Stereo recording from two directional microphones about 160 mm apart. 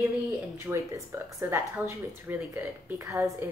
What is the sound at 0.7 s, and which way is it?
Speech, 10° right (ahead or behind).